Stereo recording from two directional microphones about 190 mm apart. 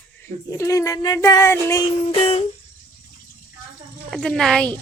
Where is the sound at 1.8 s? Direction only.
30° left (ahead or behind).